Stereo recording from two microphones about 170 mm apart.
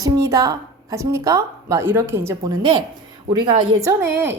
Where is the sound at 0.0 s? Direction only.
20° right (ahead or behind).